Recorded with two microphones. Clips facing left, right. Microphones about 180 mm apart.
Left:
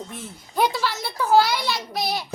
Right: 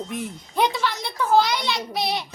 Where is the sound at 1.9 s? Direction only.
Centre (ahead or behind).